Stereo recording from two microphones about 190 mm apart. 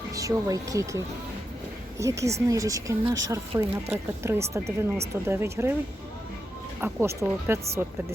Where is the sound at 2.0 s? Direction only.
15° right (ahead or behind).